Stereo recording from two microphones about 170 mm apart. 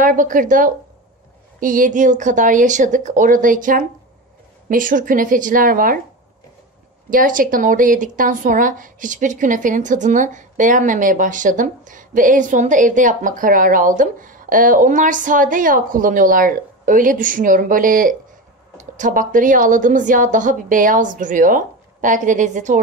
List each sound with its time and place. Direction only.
0.0 s speech: 50° right (ahead or behind)
7.1 s speech: 55° right (ahead or behind)